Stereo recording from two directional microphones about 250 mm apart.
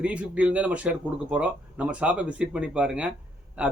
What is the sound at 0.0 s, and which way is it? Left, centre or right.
Speech, centre.